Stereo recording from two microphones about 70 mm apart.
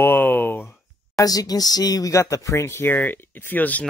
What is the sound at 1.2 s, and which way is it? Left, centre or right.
Speech, left.